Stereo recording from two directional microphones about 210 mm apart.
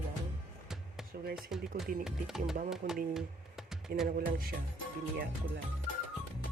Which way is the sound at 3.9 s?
45° right (ahead or behind).